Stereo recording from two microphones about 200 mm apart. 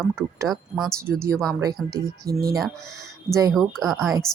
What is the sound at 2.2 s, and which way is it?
Speech, 50° right (ahead or behind).